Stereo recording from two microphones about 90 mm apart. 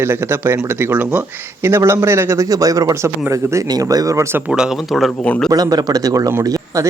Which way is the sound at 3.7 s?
45° right (ahead or behind).